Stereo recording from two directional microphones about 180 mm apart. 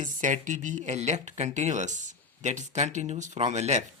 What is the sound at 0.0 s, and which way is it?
Speech, 45° right (ahead or behind).